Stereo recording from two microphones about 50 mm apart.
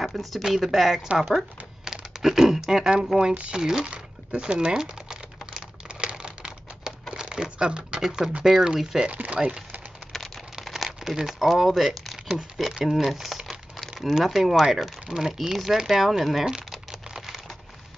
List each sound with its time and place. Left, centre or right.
0.0 s speech: centre
3.3 s speech: right
3.6 s typing: centre
7.2 s a sound: centre
8.0 s speech: centre
9.1 s speech: right
10.6 s crumpling: centre
11.2 s speech: centre